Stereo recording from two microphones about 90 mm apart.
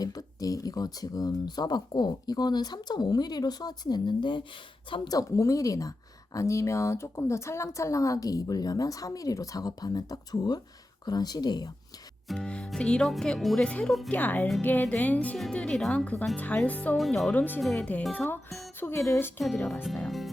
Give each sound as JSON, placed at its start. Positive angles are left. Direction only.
{"t": 0.0, "sound": "speech", "side_deg": 45}
{"t": 5.0, "sound": "a woman's voice", "side_deg": 40}
{"t": 12.3, "sound": "speech", "side_deg": 10}
{"t": 17.0, "sound": "speech", "side_deg": 5}
{"t": 17.3, "sound": "speech", "side_deg": 20}
{"t": 17.6, "sound": "speech", "side_deg": 0}
{"t": 18.3, "sound": "a woman's voice", "side_deg": 25}
{"t": 19.6, "sound": "speech", "side_deg": 0}